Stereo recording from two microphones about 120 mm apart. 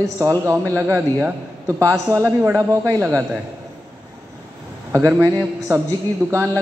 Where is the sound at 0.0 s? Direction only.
25° right (ahead or behind).